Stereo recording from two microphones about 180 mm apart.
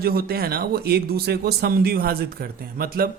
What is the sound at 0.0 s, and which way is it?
Speech, 60° right (ahead or behind).